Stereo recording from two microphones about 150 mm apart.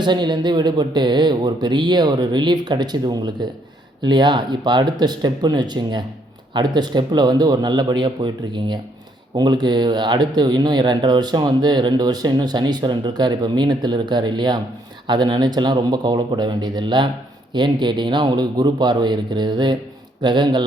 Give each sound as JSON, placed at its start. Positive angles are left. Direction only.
{"t": 0.0, "sound": "speech", "side_deg": -30}